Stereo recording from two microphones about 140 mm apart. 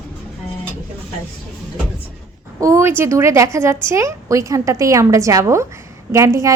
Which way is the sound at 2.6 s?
20° right (ahead or behind).